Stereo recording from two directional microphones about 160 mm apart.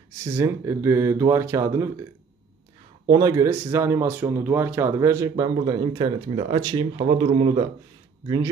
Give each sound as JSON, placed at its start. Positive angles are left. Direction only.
{"t": 0.2, "sound": "speech", "side_deg": -15}
{"t": 3.1, "sound": "speech", "side_deg": -20}